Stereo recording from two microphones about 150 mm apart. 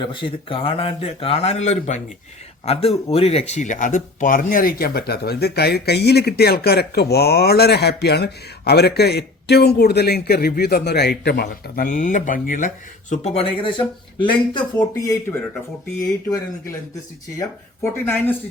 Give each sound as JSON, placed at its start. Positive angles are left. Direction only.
{"t": 0.0, "sound": "a man's voice", "side_deg": 35}
{"t": 18.0, "sound": "speech", "side_deg": 15}